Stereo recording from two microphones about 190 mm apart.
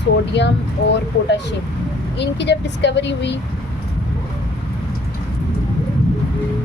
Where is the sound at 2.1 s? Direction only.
65° left (ahead or behind).